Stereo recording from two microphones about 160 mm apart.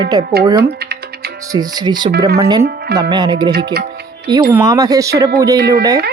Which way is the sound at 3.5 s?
85° right.